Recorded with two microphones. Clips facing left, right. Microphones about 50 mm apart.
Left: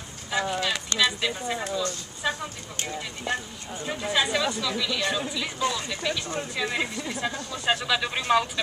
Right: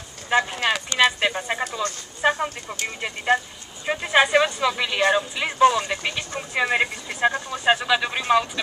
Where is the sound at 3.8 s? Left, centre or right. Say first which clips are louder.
Right 7 dB; right.